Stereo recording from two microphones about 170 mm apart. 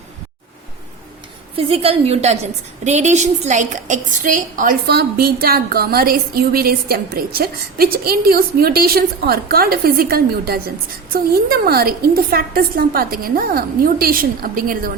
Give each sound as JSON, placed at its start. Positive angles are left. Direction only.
{"t": 1.5, "sound": "a woman's voice", "side_deg": -35}